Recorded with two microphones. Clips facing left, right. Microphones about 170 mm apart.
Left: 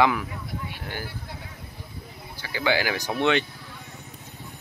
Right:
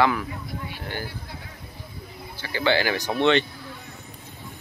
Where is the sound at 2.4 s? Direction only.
10° left (ahead or behind).